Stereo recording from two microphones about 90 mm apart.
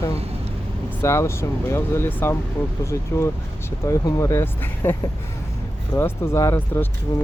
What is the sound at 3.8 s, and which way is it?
Speech, 35° left (ahead or behind).